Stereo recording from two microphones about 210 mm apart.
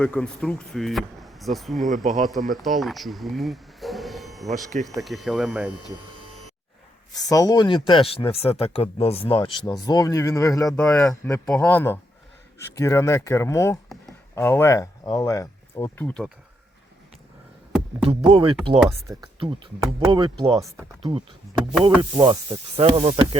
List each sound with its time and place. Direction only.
0.0 s speech: 5° left (ahead or behind)
7.1 s speech: 15° left (ahead or behind)
10.7 s speech: 5° left (ahead or behind)
18.0 s speech: 25° right (ahead or behind)
18.9 s speech: 15° right (ahead or behind)